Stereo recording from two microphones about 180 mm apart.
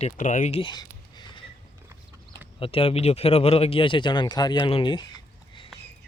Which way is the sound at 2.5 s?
30° left (ahead or behind).